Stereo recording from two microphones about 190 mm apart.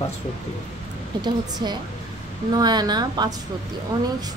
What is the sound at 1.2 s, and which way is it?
A woman's voice, 20° right (ahead or behind).